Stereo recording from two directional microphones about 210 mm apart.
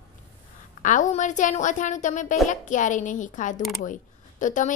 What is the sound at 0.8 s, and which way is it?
A woman's voice, 35° left (ahead or behind).